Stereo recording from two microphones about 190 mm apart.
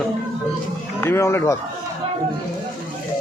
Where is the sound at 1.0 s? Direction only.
15° left (ahead or behind).